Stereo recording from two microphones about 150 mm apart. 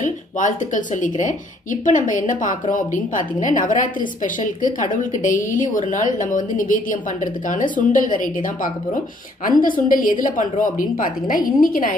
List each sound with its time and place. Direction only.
0.0 s a woman's voice: 55° left (ahead or behind)